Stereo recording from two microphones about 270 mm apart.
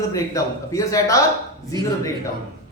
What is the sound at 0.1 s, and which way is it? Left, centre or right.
Speech, centre.